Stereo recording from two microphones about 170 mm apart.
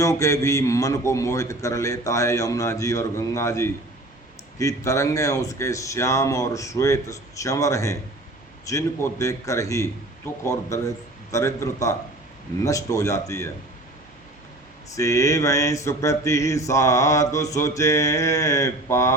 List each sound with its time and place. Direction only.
0.0 s mantra: 20° left (ahead or behind)
10.4 s a man's voice: 20° left (ahead or behind)
12.6 s mantra: 20° left (ahead or behind)
14.8 s mantra: 20° left (ahead or behind)